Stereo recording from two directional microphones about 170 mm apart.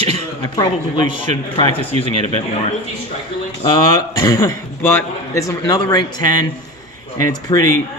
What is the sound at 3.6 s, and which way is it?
A man's voice, 20° left (ahead or behind).